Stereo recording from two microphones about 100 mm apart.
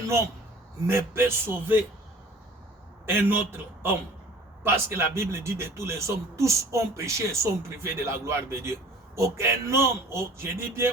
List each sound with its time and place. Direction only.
0.9 s speech: 25° right (ahead or behind)
3.1 s speech: 20° right (ahead or behind)